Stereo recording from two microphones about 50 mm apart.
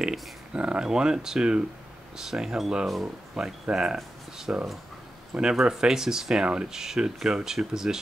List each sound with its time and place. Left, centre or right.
0.0 s speech: centre